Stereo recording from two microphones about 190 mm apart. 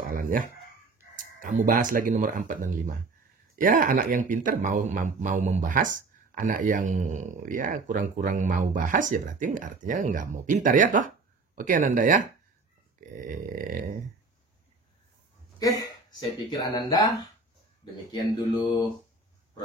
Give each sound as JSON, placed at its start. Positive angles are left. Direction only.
{"t": 0.0, "sound": "speech", "side_deg": -45}
{"t": 15.8, "sound": "speech", "side_deg": 20}